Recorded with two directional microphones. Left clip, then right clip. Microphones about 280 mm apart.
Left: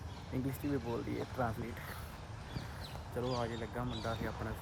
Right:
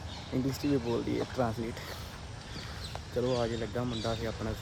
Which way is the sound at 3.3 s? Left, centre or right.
Centre.